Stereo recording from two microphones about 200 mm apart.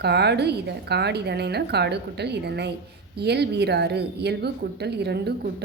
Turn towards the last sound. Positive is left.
turn(degrees=-55)  # may be behind; listen again after turning